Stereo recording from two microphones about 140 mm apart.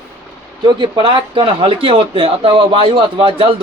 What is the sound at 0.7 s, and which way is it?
A man's voice, 35° right (ahead or behind).